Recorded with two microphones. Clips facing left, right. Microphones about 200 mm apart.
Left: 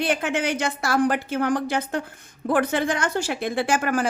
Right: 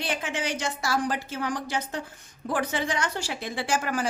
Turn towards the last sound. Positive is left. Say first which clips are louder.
# left 5 dB
turn(degrees=55)  # may be behind; listen again after turning